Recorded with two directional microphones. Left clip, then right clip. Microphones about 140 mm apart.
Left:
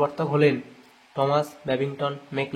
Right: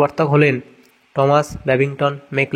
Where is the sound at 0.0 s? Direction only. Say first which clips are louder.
Right 6 dB; 45° right (ahead or behind).